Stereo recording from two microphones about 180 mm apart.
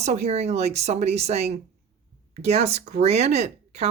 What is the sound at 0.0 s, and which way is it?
Speech, 35° right (ahead or behind).